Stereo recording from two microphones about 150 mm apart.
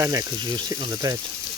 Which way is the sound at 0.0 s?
20° right (ahead or behind).